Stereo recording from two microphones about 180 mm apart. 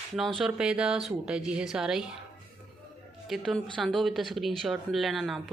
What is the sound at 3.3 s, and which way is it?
A woman's voice, centre (ahead or behind).